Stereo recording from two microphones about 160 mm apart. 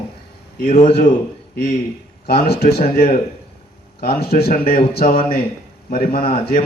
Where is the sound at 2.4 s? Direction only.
75° left (ahead or behind).